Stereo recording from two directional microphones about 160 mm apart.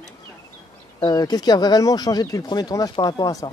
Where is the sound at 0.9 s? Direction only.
25° left (ahead or behind).